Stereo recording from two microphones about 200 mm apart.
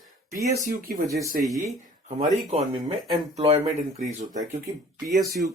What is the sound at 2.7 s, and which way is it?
Speech, 25° right (ahead or behind).